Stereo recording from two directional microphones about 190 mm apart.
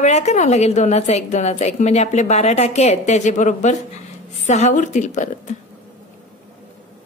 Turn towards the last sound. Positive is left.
turn(degrees=40)  # may be behind; listen again after turning